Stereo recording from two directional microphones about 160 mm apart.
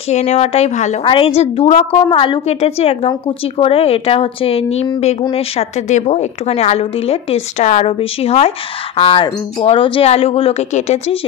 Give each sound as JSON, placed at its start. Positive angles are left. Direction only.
{"t": 0.1, "sound": "a woman's voice", "side_deg": 45}
{"t": 1.0, "sound": "a woman's voice", "side_deg": 35}
{"t": 2.0, "sound": "a woman's voice", "side_deg": 30}